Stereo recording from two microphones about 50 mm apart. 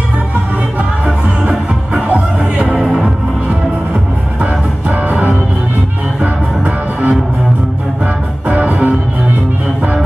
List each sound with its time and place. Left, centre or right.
1.4 s music: right
2.7 s music: centre
4.4 s music: right
6.2 s music: right
8.5 s music: right